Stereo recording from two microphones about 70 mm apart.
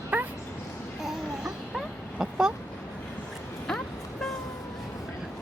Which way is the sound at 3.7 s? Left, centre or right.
Centre.